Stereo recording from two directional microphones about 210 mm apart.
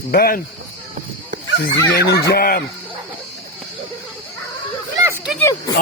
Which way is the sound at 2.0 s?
50° left (ahead or behind).